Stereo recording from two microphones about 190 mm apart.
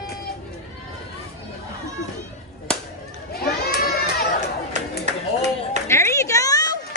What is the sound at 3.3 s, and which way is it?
Crowd, 55° left (ahead or behind).